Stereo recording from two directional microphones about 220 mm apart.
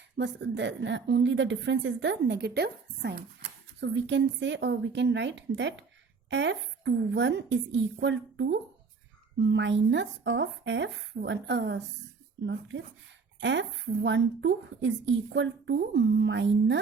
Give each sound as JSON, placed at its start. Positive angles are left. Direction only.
{"t": 0.2, "sound": "a woman's voice", "side_deg": -55}